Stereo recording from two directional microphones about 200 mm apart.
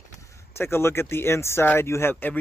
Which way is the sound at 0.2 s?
15° left (ahead or behind).